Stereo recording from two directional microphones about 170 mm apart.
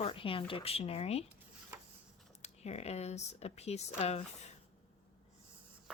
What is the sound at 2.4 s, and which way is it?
Speech, 40° left (ahead or behind).